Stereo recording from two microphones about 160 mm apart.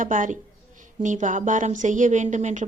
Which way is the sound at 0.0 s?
55° right (ahead or behind).